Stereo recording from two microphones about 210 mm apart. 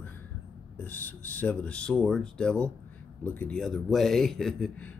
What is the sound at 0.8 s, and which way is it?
A man's voice, 10° left (ahead or behind).